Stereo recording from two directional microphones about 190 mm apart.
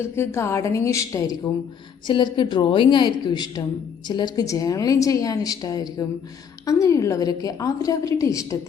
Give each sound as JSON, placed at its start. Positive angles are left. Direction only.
{"t": 0.2, "sound": "a woman's voice", "side_deg": 15}